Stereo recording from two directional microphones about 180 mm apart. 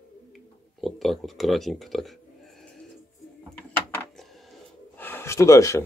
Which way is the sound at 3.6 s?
10° left (ahead or behind).